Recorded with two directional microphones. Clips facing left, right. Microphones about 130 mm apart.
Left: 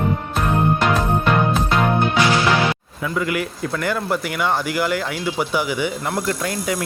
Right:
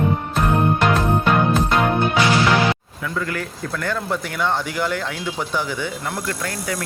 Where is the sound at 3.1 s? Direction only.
10° left (ahead or behind).